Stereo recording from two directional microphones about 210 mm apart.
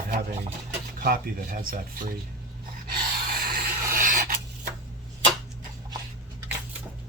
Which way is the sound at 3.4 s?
45° right (ahead or behind).